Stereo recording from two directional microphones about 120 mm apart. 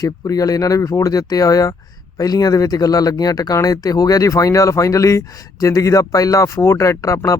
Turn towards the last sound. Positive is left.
turn(degrees=25)  # may be behind; listen again after turning